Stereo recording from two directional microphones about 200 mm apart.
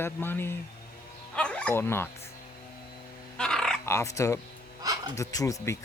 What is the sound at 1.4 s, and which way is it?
Dog, 5° left (ahead or behind).